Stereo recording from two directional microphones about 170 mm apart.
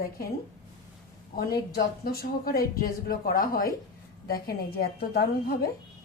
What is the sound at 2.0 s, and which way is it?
A woman's voice, 65° left (ahead or behind).